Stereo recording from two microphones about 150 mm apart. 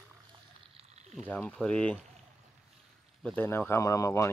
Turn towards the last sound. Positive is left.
turn(degrees=20)  # may be behind; listen again after turning